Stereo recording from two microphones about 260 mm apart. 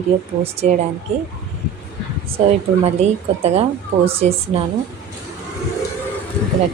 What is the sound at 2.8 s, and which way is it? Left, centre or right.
A woman's voice, right.